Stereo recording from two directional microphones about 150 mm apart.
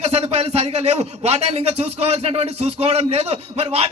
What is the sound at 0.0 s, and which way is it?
A man's voice, 45° right (ahead or behind).